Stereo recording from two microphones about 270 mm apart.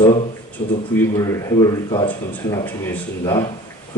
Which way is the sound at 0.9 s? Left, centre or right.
Centre.